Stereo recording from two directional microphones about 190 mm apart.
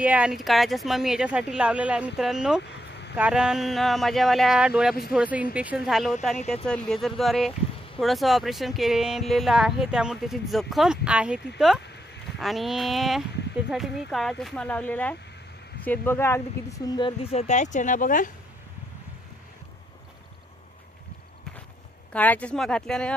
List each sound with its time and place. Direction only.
0.0 s speech: 5° right (ahead or behind)
2.7 s vehicle: 60° left (ahead or behind)
3.2 s speech: 5° right (ahead or behind); by 18.3 s 45° left (ahead or behind)
22.1 s speech: 10° left (ahead or behind)